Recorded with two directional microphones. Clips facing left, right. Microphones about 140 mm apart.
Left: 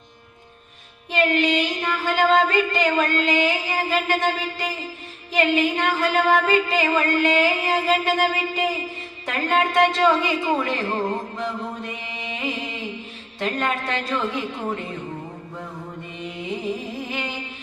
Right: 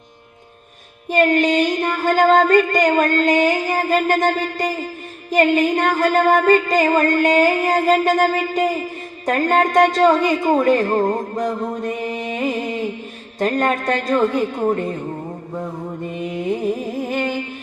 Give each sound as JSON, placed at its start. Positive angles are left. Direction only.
{"t": 1.1, "sound": "music", "side_deg": -45}
{"t": 16.0, "sound": "music", "side_deg": -50}